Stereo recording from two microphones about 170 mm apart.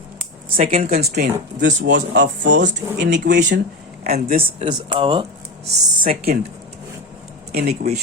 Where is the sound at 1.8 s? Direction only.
90° right.